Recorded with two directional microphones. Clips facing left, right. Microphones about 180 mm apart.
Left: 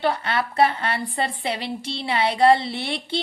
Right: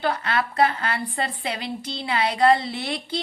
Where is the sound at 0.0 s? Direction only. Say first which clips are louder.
Left 1 dB; 30° left (ahead or behind).